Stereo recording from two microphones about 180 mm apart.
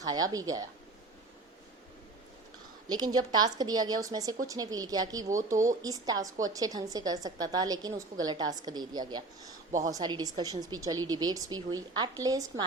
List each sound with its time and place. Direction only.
0.0 s a woman's voice: 20° right (ahead or behind)
2.9 s a woman's voice: 25° right (ahead or behind)